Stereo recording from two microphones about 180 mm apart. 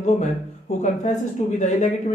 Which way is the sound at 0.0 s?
40° left (ahead or behind).